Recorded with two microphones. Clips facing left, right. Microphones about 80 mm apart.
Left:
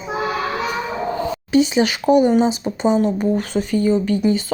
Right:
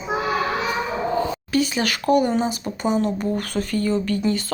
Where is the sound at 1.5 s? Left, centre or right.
Left.